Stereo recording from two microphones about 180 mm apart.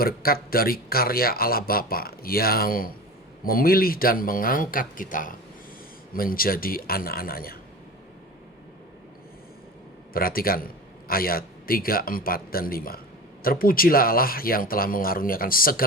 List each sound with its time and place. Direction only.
0.0 s speech: 55° left (ahead or behind)
10.1 s speech: 55° left (ahead or behind)